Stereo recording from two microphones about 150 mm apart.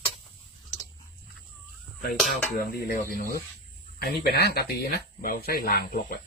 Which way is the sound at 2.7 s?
85° left.